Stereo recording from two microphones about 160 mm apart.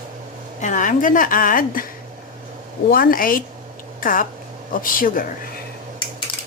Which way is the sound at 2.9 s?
65° left (ahead or behind).